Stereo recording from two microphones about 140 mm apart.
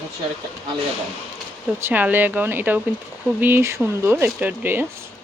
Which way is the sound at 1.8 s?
10° right (ahead or behind).